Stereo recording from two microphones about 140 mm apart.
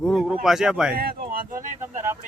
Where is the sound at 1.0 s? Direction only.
90° right.